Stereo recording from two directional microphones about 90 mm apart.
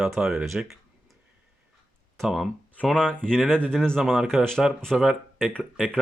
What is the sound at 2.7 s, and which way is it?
Speech, 10° left (ahead or behind).